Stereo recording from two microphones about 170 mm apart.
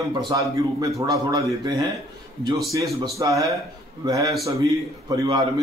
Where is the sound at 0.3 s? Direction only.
20° right (ahead or behind).